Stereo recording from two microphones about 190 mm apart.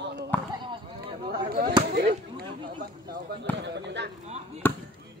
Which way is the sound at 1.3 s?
50° right (ahead or behind).